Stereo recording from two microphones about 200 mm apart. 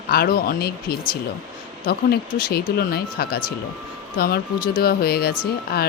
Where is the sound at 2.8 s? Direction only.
50° left (ahead or behind).